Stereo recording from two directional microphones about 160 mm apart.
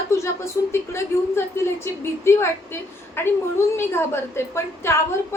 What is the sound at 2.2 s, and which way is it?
A woman's voice, 15° left (ahead or behind).